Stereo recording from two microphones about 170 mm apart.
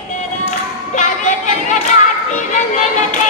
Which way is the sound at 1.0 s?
45° left (ahead or behind).